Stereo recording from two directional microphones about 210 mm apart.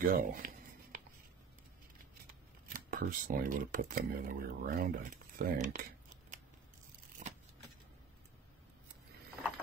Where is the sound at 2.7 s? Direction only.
45° right (ahead or behind).